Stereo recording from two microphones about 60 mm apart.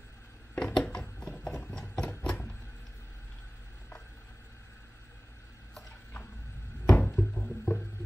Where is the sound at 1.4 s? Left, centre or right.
Centre.